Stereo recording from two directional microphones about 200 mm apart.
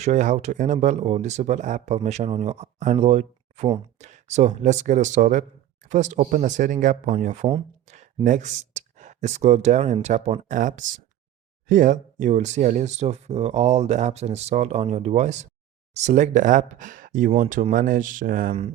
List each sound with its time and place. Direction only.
0.0 s speech: 35° right (ahead or behind)
10.5 s speech: 40° right (ahead or behind)